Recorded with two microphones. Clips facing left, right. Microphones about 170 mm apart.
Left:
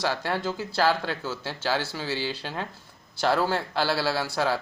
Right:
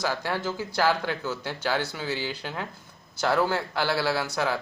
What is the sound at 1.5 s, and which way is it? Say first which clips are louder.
Speech: left 1 dB; 30° left (ahead or behind).